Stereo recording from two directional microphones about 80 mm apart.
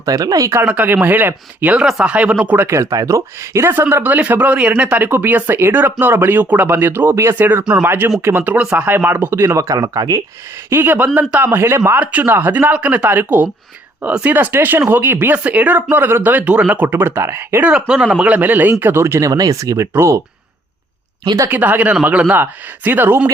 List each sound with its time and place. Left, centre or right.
0.0 s speech: right
0.6 s speech: centre
1.8 s speech: centre
2.1 s speech: centre
2.6 s speech: right
2.9 s speech: right
9.3 s speech: right
9.6 s speech: right
10.7 s speech: right
17.6 s speech: centre; by 19.3 s right
19.3 s speech: right
21.5 s speech: right